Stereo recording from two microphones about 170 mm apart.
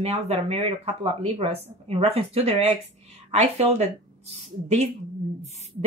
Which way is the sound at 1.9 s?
35° right (ahead or behind).